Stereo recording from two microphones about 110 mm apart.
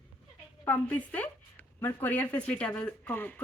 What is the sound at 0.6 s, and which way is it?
Speech, 15° left (ahead or behind).